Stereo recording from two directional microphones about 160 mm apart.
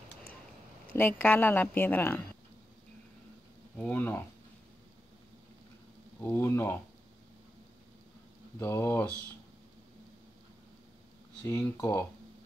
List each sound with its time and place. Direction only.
0.9 s a woman's voice: 10° left (ahead or behind)
3.7 s a woman's voice: 10° left (ahead or behind)
6.2 s a woman's voice: 15° left (ahead or behind)
8.5 s a woman's voice: 15° left (ahead or behind)
11.4 s a woman's voice: 15° left (ahead or behind)